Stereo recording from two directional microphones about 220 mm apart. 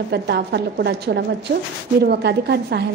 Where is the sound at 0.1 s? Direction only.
50° right (ahead or behind).